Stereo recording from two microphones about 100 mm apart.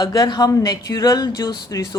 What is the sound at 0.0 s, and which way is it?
Speech, 40° left (ahead or behind).